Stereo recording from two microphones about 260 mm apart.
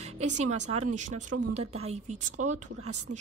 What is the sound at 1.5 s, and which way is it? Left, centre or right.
Speech, right.